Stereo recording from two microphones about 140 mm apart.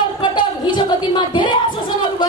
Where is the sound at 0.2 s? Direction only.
35° left (ahead or behind).